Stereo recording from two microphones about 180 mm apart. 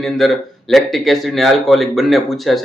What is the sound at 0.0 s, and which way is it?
Speech, centre (ahead or behind).